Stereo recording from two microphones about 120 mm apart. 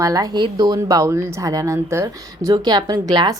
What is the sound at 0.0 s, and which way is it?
Speech, 30° right (ahead or behind).